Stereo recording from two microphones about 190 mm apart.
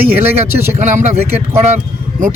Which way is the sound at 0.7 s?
40° right (ahead or behind).